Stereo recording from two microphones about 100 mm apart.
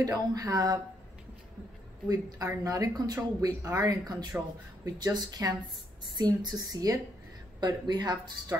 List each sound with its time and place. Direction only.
0.0 s speech: 35° right (ahead or behind)
2.0 s speech: 35° right (ahead or behind)